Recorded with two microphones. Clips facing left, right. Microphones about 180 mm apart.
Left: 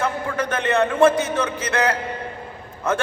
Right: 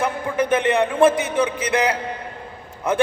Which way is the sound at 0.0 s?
15° right (ahead or behind).